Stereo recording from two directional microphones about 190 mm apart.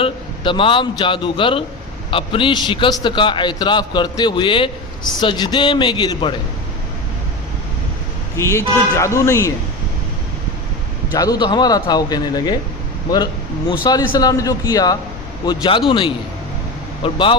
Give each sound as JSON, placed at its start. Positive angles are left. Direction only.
{"t": 0.0, "sound": "a man's voice", "side_deg": 25}
{"t": 8.4, "sound": "speech", "side_deg": 15}
{"t": 11.1, "sound": "a man's voice", "side_deg": 20}
{"t": 13.8, "sound": "a man's voice", "side_deg": 20}